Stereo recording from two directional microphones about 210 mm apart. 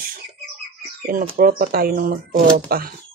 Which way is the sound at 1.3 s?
45° right (ahead or behind).